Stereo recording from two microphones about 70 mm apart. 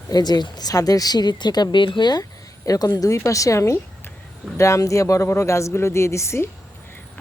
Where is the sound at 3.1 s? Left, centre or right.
Left.